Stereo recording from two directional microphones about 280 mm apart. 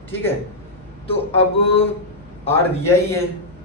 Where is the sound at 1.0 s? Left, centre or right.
Centre.